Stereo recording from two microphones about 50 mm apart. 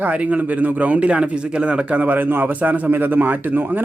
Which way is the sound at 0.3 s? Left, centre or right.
Right.